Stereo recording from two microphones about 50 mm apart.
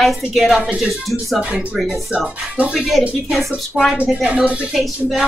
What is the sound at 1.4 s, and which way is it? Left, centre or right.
Speech, right.